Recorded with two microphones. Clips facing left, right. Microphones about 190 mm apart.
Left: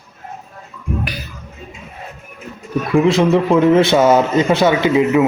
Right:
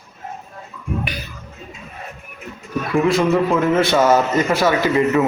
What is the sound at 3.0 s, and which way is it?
A man's voice, 20° left (ahead or behind).